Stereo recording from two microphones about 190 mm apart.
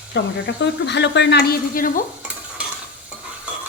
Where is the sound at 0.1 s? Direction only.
65° left (ahead or behind); by 2.0 s 50° left (ahead or behind).